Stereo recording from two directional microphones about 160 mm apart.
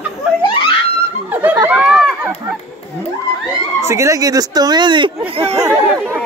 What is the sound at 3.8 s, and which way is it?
Speech, 20° right (ahead or behind).